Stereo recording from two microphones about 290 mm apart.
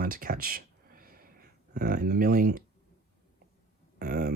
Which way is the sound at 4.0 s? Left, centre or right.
Right.